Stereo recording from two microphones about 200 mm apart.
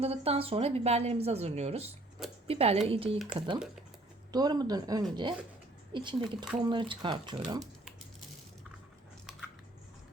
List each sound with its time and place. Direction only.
0.0 s speech: 30° right (ahead or behind)